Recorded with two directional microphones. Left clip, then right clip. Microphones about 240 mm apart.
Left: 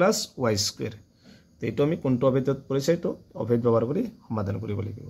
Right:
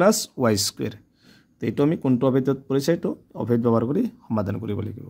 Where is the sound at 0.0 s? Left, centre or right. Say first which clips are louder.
Right 4 dB; right.